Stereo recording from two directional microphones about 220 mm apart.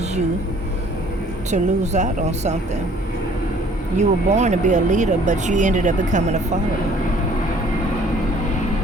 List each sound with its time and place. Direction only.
1.5 s speech: 30° right (ahead or behind)
3.9 s speech: 30° right (ahead or behind)